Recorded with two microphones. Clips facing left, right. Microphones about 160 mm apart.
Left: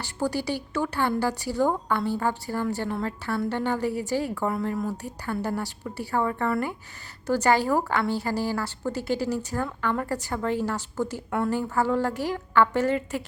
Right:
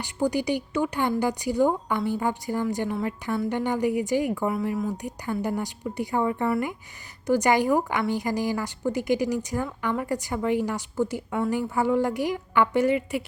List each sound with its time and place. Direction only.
0.0 s a woman's voice: 15° right (ahead or behind)